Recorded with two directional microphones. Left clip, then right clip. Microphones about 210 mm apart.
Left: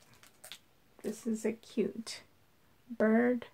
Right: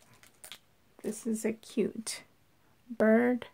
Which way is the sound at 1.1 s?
45° right (ahead or behind).